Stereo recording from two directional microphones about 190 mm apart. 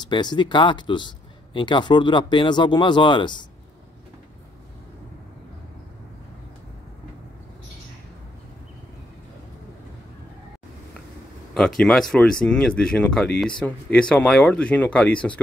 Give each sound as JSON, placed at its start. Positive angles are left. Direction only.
{"t": 0.0, "sound": "speech", "side_deg": 25}
{"t": 11.5, "sound": "speech", "side_deg": 5}